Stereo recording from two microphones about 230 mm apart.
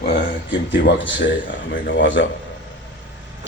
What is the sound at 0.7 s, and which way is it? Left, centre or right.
A man's voice, left.